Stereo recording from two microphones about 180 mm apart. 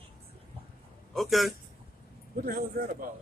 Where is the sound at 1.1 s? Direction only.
Centre (ahead or behind).